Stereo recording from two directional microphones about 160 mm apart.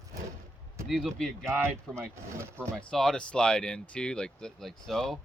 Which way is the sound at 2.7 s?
5° left (ahead or behind).